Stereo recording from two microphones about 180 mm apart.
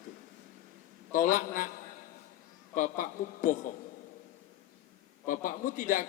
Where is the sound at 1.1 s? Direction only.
45° left (ahead or behind).